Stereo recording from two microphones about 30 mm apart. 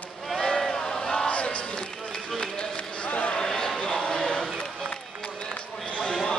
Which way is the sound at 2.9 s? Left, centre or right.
Left.